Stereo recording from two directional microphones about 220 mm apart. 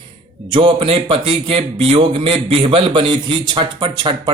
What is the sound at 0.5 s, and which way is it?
A man's voice, 20° right (ahead or behind).